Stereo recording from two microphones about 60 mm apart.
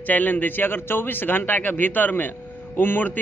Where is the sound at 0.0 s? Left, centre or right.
Left.